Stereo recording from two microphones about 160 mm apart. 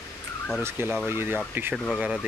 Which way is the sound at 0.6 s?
15° right (ahead or behind).